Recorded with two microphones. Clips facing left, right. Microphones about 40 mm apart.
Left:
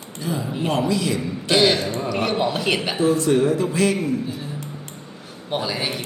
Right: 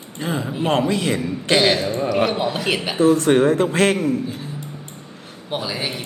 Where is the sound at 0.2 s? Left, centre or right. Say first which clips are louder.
Right 2 dB; right.